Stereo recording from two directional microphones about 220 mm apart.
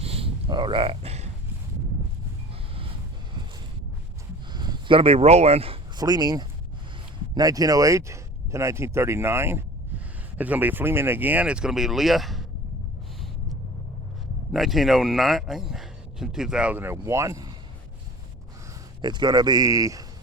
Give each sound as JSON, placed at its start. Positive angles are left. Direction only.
{"t": 0.0, "sound": "a sound", "side_deg": -25}
{"t": 4.5, "sound": "speech", "side_deg": -20}
{"t": 14.5, "sound": "speech", "side_deg": 0}
{"t": 19.0, "sound": "speech", "side_deg": -20}